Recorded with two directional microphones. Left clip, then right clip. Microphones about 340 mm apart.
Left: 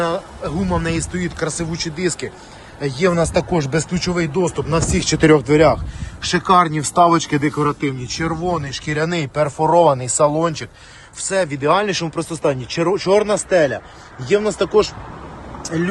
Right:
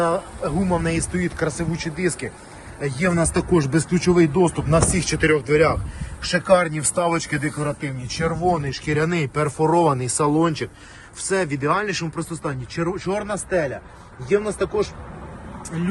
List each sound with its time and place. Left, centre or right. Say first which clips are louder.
0.0 s speech: even; centre
5.0 s speech: left 6 dB; centre